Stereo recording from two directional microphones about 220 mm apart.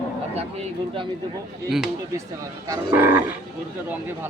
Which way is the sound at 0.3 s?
25° right (ahead or behind).